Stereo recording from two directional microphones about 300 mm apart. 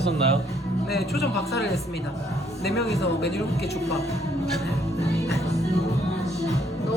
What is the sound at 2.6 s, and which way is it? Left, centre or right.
Speech, left.